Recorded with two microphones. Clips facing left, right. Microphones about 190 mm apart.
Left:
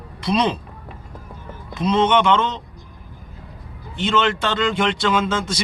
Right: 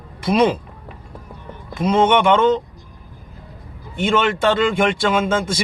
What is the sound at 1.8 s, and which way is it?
Speech, 50° right (ahead or behind).